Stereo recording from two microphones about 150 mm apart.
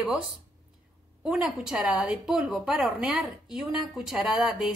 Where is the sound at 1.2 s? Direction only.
5° right (ahead or behind).